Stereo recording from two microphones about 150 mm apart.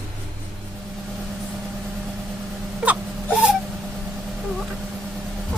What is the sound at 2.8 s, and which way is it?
Wail, 10° right (ahead or behind).